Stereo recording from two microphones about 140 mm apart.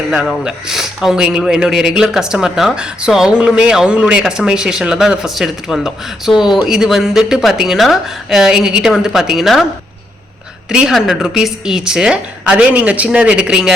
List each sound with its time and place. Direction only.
0.1 s a man's voice: 5° right (ahead or behind)
10.7 s a man's voice: 5° right (ahead or behind)